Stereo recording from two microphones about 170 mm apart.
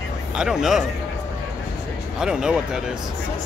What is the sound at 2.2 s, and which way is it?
Speech, 5° right (ahead or behind).